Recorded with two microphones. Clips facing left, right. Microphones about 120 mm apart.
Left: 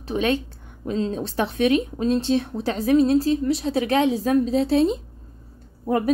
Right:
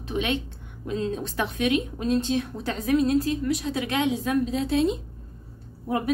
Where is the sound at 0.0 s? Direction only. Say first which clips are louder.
Left 5 dB; 35° left (ahead or behind).